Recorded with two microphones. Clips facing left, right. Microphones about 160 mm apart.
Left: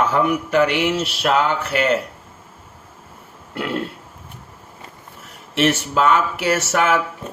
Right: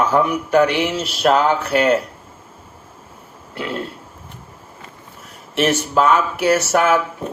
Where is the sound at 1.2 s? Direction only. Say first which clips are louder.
Right 5 dB; 40° right (ahead or behind).